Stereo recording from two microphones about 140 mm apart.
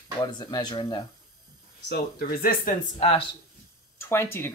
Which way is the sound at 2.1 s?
90° left.